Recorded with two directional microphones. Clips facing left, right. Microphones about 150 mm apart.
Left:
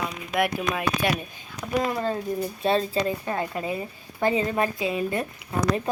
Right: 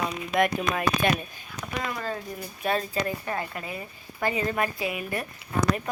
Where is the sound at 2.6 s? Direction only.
25° left (ahead or behind).